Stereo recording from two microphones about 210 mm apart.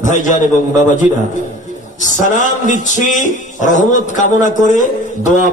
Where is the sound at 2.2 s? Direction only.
40° left (ahead or behind).